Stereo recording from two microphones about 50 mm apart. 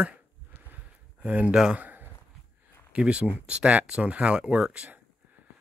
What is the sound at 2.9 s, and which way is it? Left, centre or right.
Speech, right.